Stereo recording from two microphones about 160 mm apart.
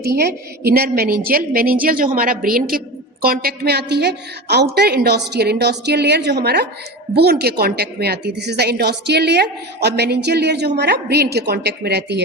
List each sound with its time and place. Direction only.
0.0 s a woman's voice: 85° right